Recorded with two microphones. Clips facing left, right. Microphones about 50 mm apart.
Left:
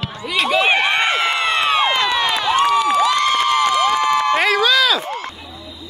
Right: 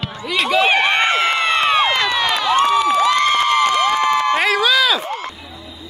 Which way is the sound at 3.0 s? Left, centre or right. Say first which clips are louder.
Right 1 dB; right.